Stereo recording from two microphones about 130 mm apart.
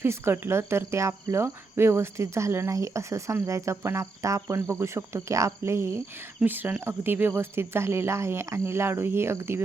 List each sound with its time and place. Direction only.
0.0 s speech: 20° right (ahead or behind)